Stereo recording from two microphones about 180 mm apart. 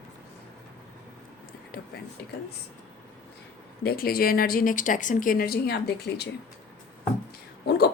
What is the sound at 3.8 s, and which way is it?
Speech, 55° left (ahead or behind).